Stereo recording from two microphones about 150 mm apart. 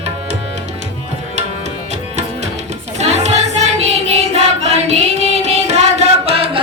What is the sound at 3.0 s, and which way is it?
Child singing, 50° right (ahead or behind).